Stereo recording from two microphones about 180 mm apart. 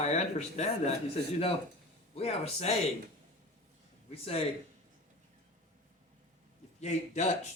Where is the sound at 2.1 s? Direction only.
35° left (ahead or behind).